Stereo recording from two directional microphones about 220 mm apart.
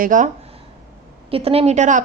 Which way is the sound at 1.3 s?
25° right (ahead or behind).